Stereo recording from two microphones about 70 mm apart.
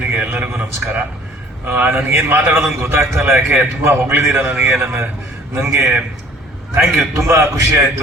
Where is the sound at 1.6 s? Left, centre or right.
Right.